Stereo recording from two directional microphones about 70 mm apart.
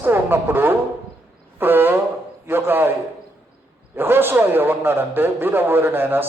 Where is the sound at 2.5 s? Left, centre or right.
Right.